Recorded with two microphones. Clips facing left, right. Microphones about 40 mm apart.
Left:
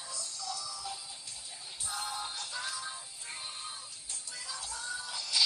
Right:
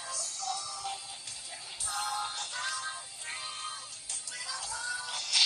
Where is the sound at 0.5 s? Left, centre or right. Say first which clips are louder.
Right 3 dB; right.